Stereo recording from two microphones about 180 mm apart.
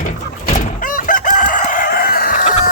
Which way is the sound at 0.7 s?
50° left (ahead or behind).